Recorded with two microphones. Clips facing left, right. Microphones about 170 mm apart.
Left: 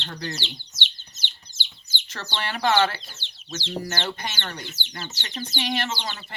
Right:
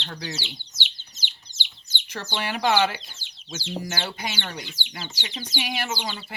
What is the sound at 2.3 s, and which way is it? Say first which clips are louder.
Speech: even; 10° right (ahead or behind).